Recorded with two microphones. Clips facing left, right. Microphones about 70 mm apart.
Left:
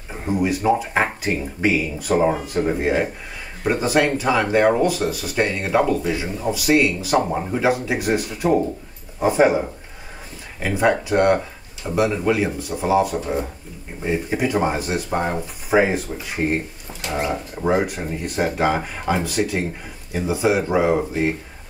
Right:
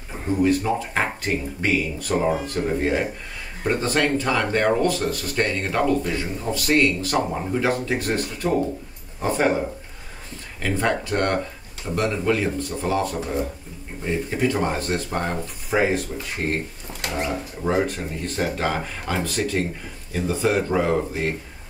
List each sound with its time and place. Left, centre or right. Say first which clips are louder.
0.3 s speech: left 1 dB; centre
10.6 s speech: left 4 dB; centre
17.0 s speech: left 2 dB; right
17.6 s speech: left 2 dB; centre